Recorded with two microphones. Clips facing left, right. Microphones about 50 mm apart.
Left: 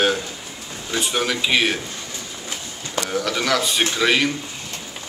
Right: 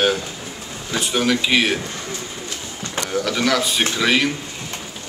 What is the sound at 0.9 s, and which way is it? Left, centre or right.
Speech, centre.